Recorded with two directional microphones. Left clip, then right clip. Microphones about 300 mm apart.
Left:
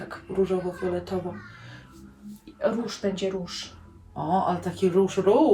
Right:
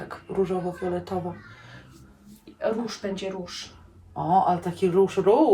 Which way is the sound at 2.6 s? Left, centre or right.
Centre.